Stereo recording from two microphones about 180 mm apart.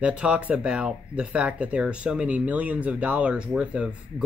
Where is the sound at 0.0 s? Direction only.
5° right (ahead or behind).